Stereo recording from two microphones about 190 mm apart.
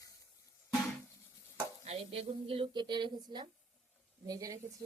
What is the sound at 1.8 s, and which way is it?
Speech, 35° right (ahead or behind).